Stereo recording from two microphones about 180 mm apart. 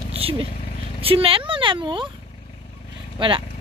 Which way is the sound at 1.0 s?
30° right (ahead or behind).